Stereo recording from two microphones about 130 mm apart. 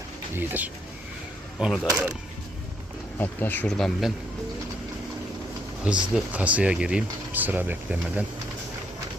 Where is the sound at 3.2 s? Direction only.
15° left (ahead or behind).